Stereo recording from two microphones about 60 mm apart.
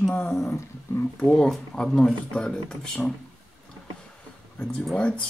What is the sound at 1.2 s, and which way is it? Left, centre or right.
Speech, centre.